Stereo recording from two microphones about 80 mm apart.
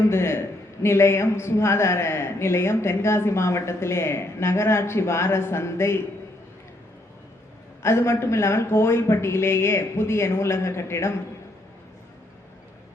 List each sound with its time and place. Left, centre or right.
0.1 s a man's voice: left
7.8 s a man's voice: left